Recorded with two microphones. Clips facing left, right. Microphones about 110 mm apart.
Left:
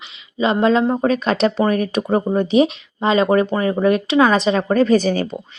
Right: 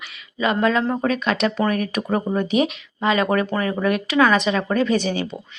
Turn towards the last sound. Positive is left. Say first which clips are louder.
# left 5 dB
turn(degrees=40)  # may be behind; listen again after turning